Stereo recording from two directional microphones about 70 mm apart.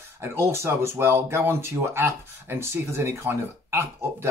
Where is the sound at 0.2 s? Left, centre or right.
Right.